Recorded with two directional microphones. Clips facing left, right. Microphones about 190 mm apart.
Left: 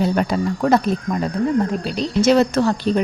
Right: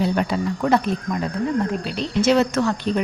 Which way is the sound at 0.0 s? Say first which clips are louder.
Left 2 dB; 40° left (ahead or behind).